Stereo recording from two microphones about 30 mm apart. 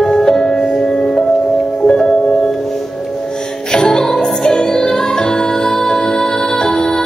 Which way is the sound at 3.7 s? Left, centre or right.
Left.